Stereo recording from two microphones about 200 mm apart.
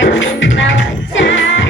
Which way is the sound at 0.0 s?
65° left (ahead or behind).